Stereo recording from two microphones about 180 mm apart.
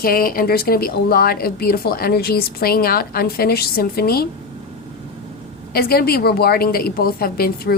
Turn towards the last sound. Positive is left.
turn(degrees=55)  # may be behind; listen again after turning